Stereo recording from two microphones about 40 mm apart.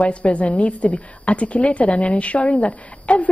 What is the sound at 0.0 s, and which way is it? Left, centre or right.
A woman's voice, left.